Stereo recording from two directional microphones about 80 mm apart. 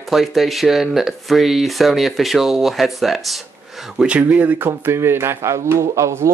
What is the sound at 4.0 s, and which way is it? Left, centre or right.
Speech, centre.